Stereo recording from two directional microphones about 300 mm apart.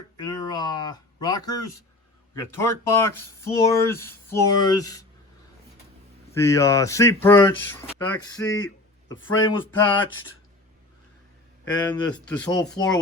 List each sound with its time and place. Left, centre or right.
0.2 s speech: centre
6.3 s speech: centre
9.0 s speech: left
11.6 s speech: centre